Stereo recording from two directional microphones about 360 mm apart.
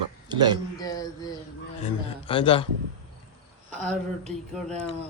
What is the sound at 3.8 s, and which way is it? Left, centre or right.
Speech, centre.